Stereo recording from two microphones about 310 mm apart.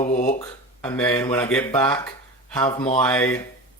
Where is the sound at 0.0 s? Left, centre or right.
Left.